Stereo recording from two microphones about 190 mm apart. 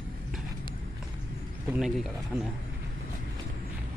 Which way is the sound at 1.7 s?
Centre (ahead or behind).